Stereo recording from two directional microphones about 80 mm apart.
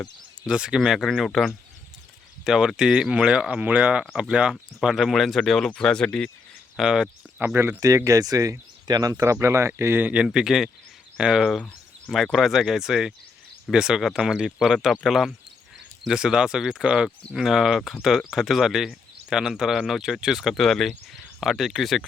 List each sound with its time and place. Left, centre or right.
0.4 s speech: centre
6.7 s speech: centre
7.3 s speech: right
10.2 s speech: centre